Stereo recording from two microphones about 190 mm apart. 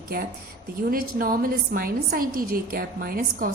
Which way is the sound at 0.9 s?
50° right (ahead or behind).